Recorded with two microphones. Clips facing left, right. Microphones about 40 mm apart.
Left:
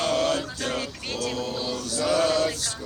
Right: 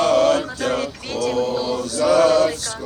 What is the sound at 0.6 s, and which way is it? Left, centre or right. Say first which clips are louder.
Male singing: right 7 dB; right.